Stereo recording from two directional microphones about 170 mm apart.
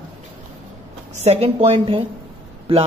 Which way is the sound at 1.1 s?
35° right (ahead or behind).